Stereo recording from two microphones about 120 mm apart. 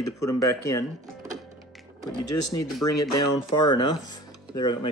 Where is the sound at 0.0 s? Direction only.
25° left (ahead or behind).